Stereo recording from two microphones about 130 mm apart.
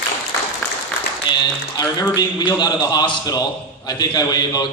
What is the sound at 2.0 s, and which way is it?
A man's voice, 30° left (ahead or behind).